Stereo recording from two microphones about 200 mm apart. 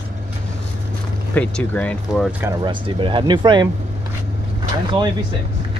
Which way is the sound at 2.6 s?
25° right (ahead or behind).